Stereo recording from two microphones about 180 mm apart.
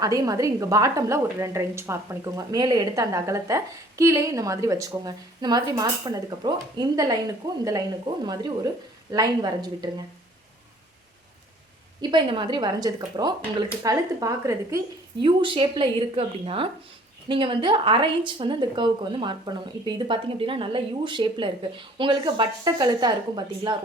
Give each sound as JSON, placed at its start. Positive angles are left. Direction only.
{"t": 0.0, "sound": "a woman's voice", "side_deg": -20}
{"t": 12.1, "sound": "a woman's voice", "side_deg": -25}